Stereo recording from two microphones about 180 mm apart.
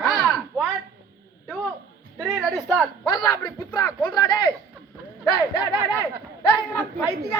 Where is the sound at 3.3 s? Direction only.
20° left (ahead or behind).